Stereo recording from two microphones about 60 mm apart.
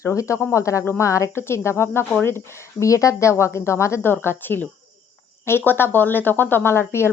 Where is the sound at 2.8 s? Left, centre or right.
Left.